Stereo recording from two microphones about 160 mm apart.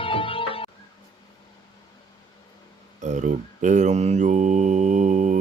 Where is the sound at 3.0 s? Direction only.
50° right (ahead or behind).